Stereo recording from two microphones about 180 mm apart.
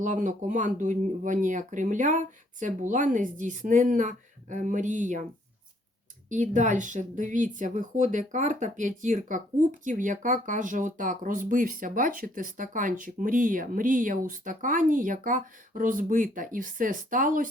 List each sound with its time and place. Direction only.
0.0 s speech: 45° right (ahead or behind)
6.2 s speech: 45° right (ahead or behind)